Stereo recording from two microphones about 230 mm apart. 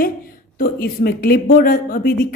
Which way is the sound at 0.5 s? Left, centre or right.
Left.